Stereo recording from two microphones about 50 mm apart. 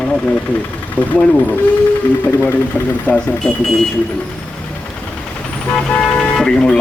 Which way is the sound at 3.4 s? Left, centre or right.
Centre.